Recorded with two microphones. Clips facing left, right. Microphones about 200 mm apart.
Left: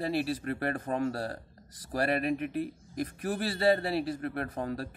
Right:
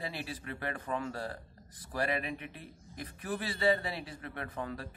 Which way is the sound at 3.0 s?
40° left (ahead or behind).